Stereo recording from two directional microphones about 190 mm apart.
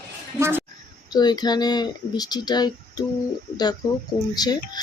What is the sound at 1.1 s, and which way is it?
Speech, 20° left (ahead or behind).